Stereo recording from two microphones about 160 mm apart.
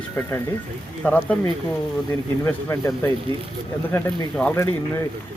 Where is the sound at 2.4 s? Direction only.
15° left (ahead or behind).